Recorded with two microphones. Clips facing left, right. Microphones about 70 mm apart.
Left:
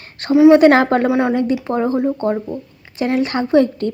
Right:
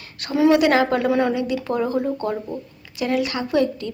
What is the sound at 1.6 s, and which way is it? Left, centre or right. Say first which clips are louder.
Speech: left 4 dB; left.